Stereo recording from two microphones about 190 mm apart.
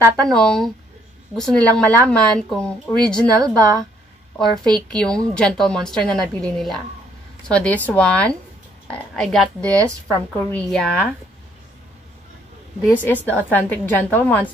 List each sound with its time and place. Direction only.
0.3 s a woman's voice: 5° left (ahead or behind)
3.5 s a woman's voice: 20° right (ahead or behind)
4.4 s a woman's voice: centre (ahead or behind)
9.8 s speech: 15° right (ahead or behind)
10.5 s a woman's voice: 5° left (ahead or behind)
13.1 s a woman's voice: 10° left (ahead or behind)